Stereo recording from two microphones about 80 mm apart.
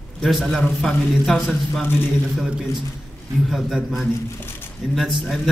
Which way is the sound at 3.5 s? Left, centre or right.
Centre.